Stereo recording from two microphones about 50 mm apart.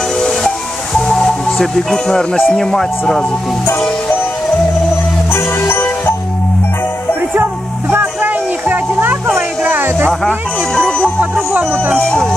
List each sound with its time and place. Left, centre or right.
0.2 s hiss: centre
1.0 s music: centre
2.5 s speech: centre
5.3 s music: left
7.9 s music: right
11.5 s speech: right